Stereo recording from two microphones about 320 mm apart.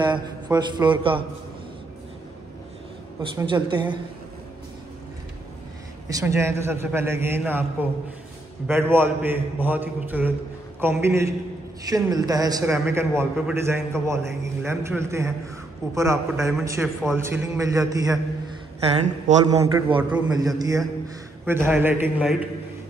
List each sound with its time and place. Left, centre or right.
0.0 s a man's voice: centre
3.2 s a man's voice: centre
6.0 s a man's voice: centre
8.6 s a man's voice: centre